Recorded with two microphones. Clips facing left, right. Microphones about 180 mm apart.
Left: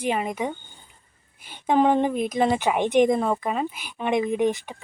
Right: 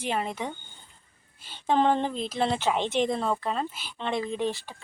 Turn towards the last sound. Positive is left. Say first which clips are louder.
# left 7 dB
turn(degrees=20)  # may be behind; listen again after turning